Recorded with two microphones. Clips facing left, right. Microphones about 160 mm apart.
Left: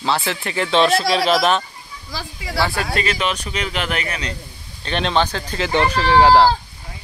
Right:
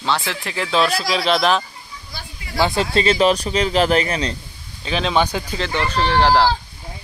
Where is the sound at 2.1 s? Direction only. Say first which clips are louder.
Left 6 dB; 90° left.